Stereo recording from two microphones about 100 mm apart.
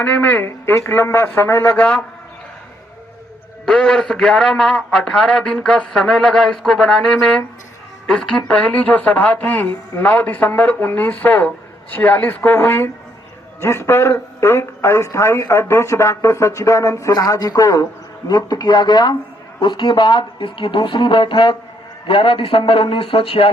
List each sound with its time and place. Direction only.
0.0 s speech: 15° left (ahead or behind)
3.7 s a man's voice: 5° left (ahead or behind); by 23.5 s 65° left (ahead or behind)